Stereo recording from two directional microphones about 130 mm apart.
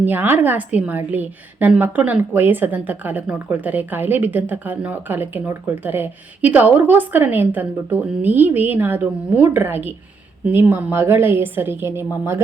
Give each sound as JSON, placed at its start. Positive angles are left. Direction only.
{"t": 0.0, "sound": "a woman's voice", "side_deg": -15}